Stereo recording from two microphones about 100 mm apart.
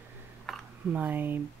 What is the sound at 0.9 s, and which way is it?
Speech, 20° right (ahead or behind).